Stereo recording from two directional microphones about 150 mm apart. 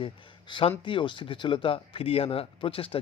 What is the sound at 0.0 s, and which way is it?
Speech, 35° left (ahead or behind).